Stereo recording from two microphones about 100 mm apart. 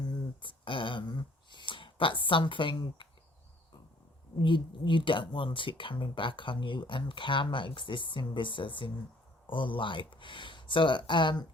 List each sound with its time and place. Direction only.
0.4 s speech: 60° left (ahead or behind)
4.4 s speech: 55° left (ahead or behind)